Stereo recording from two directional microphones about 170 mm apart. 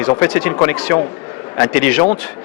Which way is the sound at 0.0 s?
20° left (ahead or behind).